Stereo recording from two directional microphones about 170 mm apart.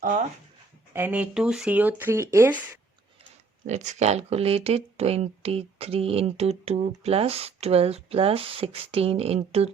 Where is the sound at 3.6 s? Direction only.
45° right (ahead or behind).